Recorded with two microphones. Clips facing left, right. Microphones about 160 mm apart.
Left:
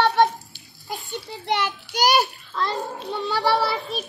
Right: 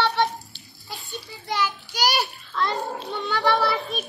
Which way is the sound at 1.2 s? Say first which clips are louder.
Left 6 dB; 65° left (ahead or behind).